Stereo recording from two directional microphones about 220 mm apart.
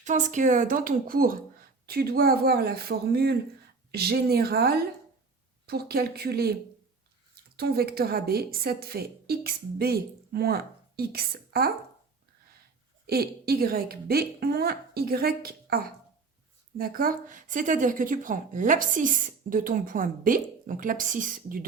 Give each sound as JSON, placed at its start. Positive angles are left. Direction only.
{"t": 0.0, "sound": "a woman's voice", "side_deg": -35}
{"t": 7.5, "sound": "a woman's voice", "side_deg": -45}
{"t": 13.1, "sound": "a woman's voice", "side_deg": -45}